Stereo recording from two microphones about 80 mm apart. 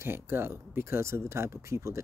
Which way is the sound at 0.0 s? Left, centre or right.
Right.